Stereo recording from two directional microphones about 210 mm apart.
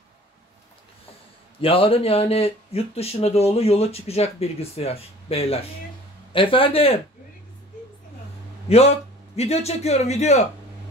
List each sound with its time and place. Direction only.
1.6 s speech: 25° left (ahead or behind)
8.6 s a man's voice: 30° left (ahead or behind)